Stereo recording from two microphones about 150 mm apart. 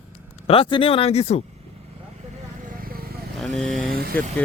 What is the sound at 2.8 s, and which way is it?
Vehicle, 80° right.